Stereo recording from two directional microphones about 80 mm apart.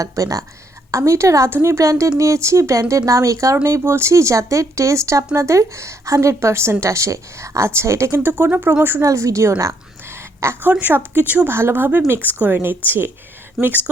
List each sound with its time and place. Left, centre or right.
0.0 s speech: right
9.0 s speech: right
10.6 s speech: right